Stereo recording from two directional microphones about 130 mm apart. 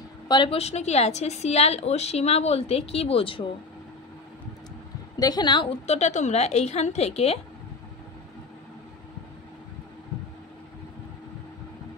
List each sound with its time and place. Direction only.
0.3 s a woman's voice: 45° left (ahead or behind)
5.2 s a woman's voice: 35° left (ahead or behind)
5.9 s a woman's voice: 60° left (ahead or behind)